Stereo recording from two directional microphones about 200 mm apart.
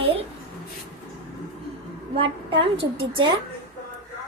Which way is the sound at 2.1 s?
25° right (ahead or behind).